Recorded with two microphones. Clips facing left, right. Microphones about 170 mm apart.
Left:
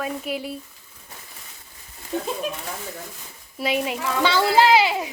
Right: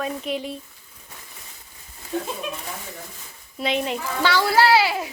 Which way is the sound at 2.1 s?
15° left (ahead or behind).